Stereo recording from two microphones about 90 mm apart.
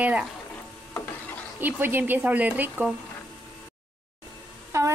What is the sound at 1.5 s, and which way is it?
Speech, 20° right (ahead or behind).